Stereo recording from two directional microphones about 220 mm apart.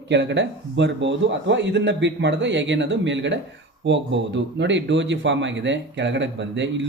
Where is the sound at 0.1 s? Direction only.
55° right (ahead or behind).